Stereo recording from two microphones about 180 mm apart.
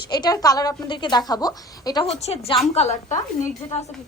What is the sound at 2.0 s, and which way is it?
A woman's voice, 35° left (ahead or behind).